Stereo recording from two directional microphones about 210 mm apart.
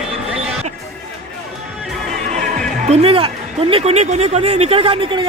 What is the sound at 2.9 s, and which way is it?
Speech, 25° right (ahead or behind).